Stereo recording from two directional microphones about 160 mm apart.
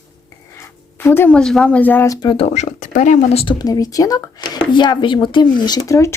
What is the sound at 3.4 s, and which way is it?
Speech, 25° left (ahead or behind).